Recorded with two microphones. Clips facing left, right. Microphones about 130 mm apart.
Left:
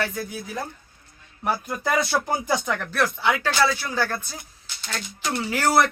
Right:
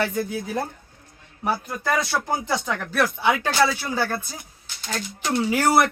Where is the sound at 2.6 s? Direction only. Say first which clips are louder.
Right 1 dB; 10° right (ahead or behind).